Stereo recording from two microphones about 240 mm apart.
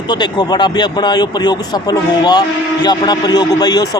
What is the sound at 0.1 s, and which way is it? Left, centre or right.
Speech, centre.